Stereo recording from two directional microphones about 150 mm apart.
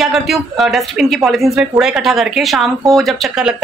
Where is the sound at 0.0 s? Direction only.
Centre (ahead or behind).